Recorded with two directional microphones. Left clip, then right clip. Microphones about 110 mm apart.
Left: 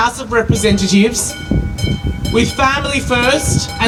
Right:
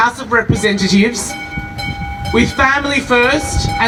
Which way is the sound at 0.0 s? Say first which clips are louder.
Right 1 dB; 30° right (ahead or behind).